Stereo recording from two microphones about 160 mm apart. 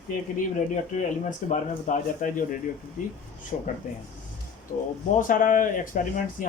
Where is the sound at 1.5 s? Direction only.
50° left (ahead or behind).